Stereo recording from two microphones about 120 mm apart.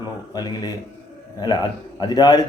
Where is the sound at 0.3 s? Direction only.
35° left (ahead or behind).